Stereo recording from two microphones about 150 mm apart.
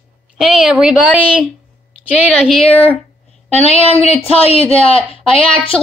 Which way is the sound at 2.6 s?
40° left (ahead or behind).